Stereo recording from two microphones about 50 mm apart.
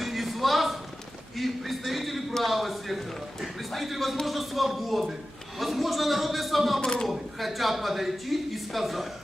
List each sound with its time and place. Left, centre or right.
0.0 s a sound: centre
1.4 s a man's voice: centre
6.8 s a man's voice: centre
7.1 s speech: centre